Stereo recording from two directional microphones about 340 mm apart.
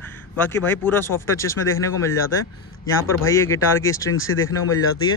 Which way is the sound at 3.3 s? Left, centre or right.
Centre.